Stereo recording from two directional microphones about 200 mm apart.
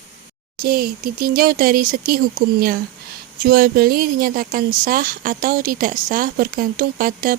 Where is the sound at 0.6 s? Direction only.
50° right (ahead or behind).